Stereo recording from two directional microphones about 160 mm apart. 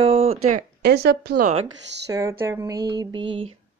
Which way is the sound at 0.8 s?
90° right.